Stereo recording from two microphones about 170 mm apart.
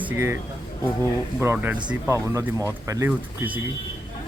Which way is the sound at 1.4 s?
10° right (ahead or behind).